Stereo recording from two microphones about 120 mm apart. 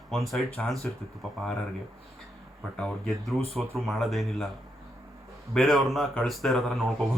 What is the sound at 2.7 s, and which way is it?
Speech, 5° left (ahead or behind).